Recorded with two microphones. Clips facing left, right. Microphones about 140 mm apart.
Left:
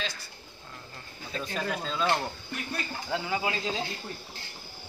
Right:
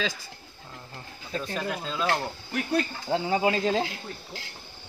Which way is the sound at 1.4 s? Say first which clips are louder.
Left 1 dB; centre (ahead or behind).